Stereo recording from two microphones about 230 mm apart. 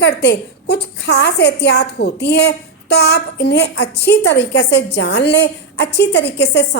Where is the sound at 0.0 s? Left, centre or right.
Left.